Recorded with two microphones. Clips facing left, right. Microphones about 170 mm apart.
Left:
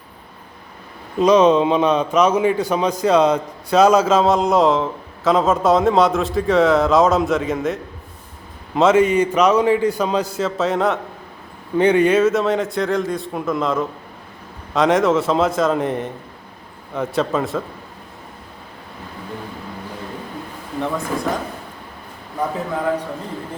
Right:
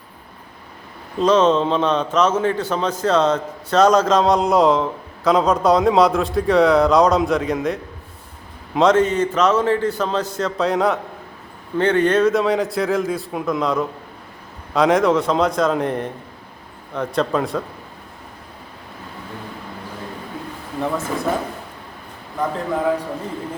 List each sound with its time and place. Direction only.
1.2 s a man's voice: 10° left (ahead or behind)
11.8 s a man's voice: 10° left (ahead or behind)
22.4 s a man's voice: 5° left (ahead or behind)